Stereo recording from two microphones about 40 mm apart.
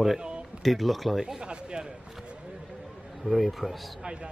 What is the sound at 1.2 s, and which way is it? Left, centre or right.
Speech, centre.